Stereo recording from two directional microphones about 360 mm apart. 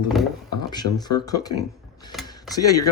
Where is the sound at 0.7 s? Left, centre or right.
Centre.